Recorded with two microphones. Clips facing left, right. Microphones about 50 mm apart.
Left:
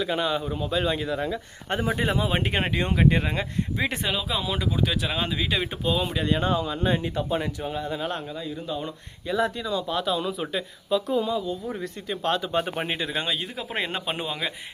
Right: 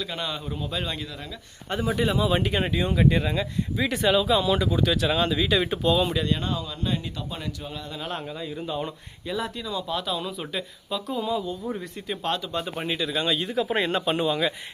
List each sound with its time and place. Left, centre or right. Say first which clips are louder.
0.2 s speech: left 5 dB; centre
1.0 s speech: left 10 dB; left
4.0 s speech: right 7 dB; centre
6.2 s speech: left 4 dB; left
8.6 s speech: right 3 dB; centre
9.3 s speech: left 4 dB; centre
12.5 s speech: left 4 dB; left
12.8 s speech: right 1 dB; left
13.2 s speech: right 5 dB; centre